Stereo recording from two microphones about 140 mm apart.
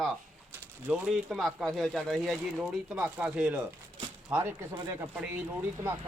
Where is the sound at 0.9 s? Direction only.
Centre (ahead or behind).